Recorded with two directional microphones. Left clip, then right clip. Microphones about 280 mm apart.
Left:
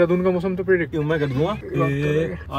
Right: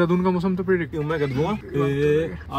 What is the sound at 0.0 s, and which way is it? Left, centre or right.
Speech, centre.